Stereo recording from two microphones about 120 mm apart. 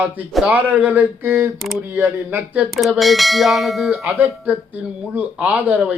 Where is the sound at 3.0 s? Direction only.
Centre (ahead or behind).